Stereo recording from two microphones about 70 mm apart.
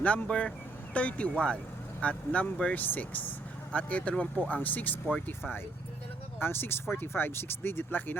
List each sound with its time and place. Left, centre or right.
0.0 s speech: centre
6.4 s speech: left